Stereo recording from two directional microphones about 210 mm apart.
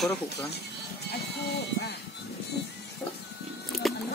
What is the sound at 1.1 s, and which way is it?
Music, 50° left (ahead or behind).